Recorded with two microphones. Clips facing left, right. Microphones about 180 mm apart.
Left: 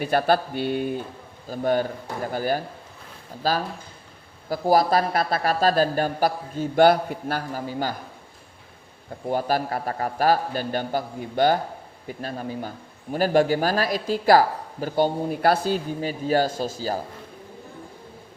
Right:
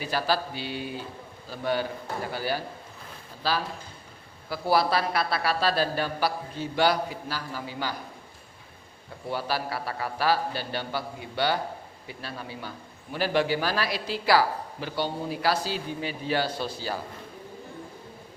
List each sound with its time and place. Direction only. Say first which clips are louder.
0.0 s a man's voice: left 7 dB; 55° left (ahead or behind)
9.2 s a man's voice: left 6 dB; 45° left (ahead or behind)